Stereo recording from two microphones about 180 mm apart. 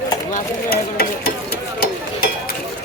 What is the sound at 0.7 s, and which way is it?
Stir, 55° left (ahead or behind).